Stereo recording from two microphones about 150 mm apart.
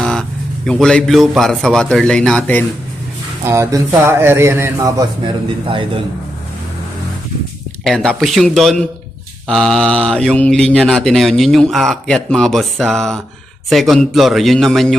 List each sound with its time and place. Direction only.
0.0 s a sound: 5° left (ahead or behind)
0.7 s speech: 5° left (ahead or behind)
3.4 s speech: 20° right (ahead or behind)
5.2 s speech: 35° right (ahead or behind)
7.9 s speech: 5° left (ahead or behind)